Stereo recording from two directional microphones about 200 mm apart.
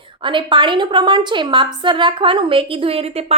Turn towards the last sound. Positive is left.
turn(degrees=-30)  # may be behind; listen again after turning